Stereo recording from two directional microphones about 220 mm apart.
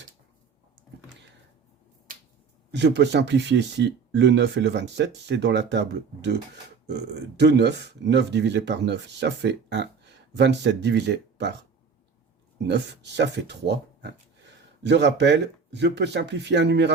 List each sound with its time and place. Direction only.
2.7 s speech: 50° right (ahead or behind)
12.6 s speech: 50° right (ahead or behind)